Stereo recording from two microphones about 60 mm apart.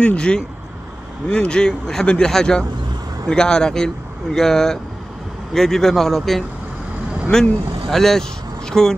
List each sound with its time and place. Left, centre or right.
0.0 s speech: centre